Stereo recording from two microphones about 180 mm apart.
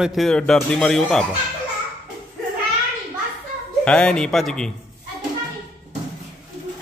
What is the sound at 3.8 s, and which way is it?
Speech, 5° left (ahead or behind).